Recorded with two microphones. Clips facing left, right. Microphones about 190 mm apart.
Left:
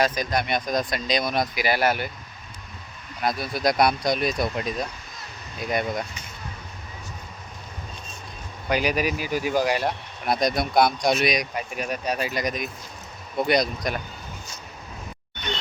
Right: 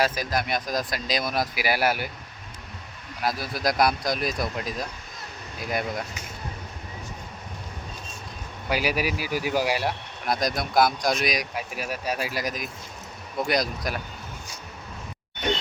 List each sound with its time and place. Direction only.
0.0 s speech: 5° right (ahead or behind)
3.2 s speech: 5° right (ahead or behind)
8.7 s speech: 5° right (ahead or behind)